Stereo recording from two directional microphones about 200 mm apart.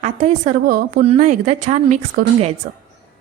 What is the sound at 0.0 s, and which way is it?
Speech, 35° right (ahead or behind).